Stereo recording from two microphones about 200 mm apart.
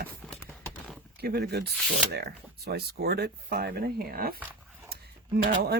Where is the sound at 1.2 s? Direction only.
55° right (ahead or behind).